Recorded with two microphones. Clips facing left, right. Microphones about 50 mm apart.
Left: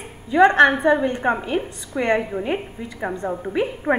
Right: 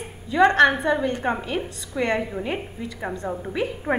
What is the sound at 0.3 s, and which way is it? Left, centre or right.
A woman's voice, centre.